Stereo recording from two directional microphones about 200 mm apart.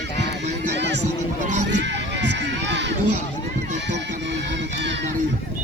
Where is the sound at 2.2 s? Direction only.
60° right (ahead or behind).